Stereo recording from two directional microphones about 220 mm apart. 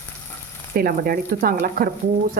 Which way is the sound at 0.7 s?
45° right (ahead or behind).